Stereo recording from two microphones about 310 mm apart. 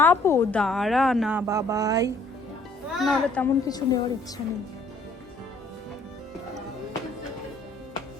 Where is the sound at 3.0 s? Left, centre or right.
Centre.